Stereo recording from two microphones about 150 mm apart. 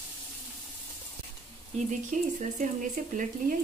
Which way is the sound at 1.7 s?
55° right (ahead or behind).